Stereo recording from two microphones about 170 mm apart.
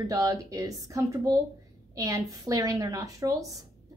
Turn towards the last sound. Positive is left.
turn(degrees=-20)  # may be behind; listen again after turning